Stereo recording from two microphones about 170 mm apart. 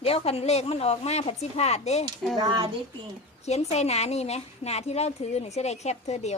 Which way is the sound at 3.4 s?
40° left (ahead or behind).